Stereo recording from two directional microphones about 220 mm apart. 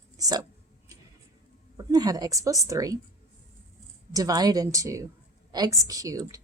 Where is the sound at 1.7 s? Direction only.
15° right (ahead or behind).